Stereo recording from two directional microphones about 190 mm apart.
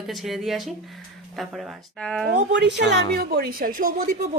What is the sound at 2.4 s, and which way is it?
A woman's voice, 65° right (ahead or behind).